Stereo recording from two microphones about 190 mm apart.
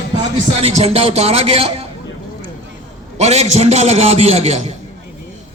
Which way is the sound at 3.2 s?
35° right (ahead or behind).